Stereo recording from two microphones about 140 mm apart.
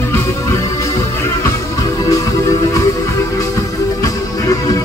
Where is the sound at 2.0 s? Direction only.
25° left (ahead or behind).